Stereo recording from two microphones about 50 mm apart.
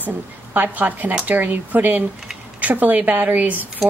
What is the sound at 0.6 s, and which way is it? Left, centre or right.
Speech, right.